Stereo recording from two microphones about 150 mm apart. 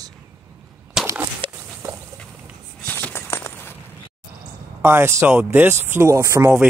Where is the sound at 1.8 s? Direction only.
20° right (ahead or behind).